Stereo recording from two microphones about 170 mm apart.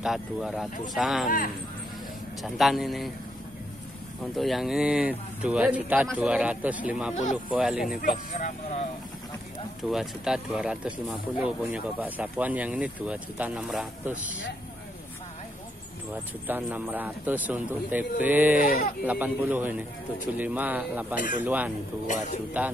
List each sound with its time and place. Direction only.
0.0 s speech: centre (ahead or behind)
2.5 s speech: centre (ahead or behind)
4.2 s speech: centre (ahead or behind)
8.3 s speech: 50° left (ahead or behind)
9.8 s speech: 5° right (ahead or behind)
16.1 s speech: 10° right (ahead or behind)
18.6 s speech: 55° left (ahead or behind)
19.0 s speech: 10° right (ahead or behind)
22.0 s speech: 45° left (ahead or behind)